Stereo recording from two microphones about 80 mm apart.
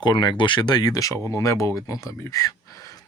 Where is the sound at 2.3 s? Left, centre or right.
Left.